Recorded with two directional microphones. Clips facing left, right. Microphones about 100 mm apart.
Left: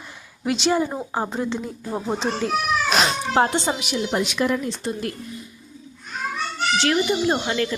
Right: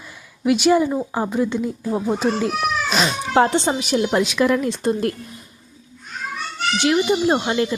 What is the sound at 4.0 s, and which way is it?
Speech, 90° right.